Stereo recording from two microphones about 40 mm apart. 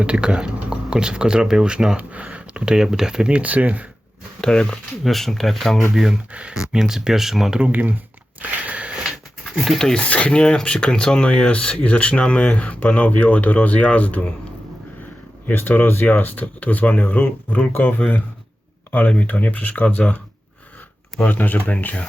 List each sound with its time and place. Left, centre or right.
0.0 s speech: right
2.0 s speech: right
2.7 s speech: centre
3.3 s speech: right
4.4 s speech: centre
5.0 s speech: centre
5.9 s speech: centre
7.7 s speech: right
8.4 s biting: right
9.7 s speech: centre
10.1 s speech: left
15.5 s speech: left
21.2 s speech: left